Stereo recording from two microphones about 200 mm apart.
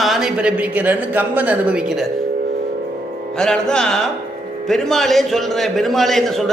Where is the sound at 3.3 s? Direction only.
5° left (ahead or behind).